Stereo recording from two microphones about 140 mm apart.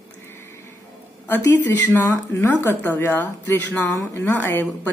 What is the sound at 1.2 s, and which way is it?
Speech, 15° left (ahead or behind).